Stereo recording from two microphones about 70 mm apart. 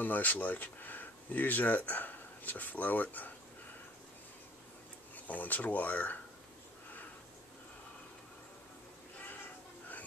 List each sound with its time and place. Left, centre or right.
0.0 s speech: left
5.1 s speech: left